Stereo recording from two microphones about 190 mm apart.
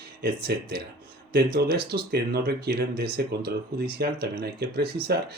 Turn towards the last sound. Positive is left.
turn(degrees=-55)  # may be behind; listen again after turning